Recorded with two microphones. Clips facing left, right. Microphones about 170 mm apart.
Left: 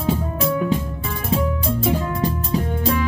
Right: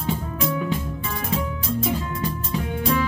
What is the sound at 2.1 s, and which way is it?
Music, 35° left (ahead or behind).